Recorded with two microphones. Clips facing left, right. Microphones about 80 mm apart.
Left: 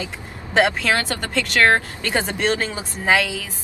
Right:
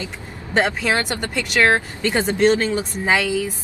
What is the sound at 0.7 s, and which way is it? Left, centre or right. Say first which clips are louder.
Speech: even; centre.